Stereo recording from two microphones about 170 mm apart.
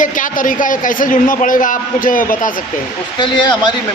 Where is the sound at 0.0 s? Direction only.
50° left (ahead or behind).